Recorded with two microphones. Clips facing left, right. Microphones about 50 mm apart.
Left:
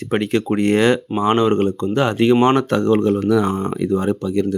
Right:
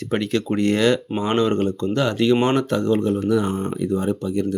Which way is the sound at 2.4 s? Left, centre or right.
Left.